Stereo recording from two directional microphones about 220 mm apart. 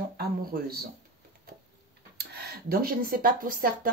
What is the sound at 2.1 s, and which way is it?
Speech, 45° right (ahead or behind).